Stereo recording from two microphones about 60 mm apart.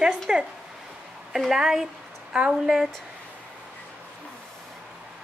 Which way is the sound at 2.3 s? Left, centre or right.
Centre.